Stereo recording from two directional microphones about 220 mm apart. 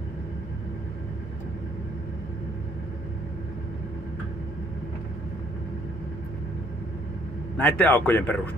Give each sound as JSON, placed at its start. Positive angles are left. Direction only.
{"t": 7.5, "sound": "speech", "side_deg": 5}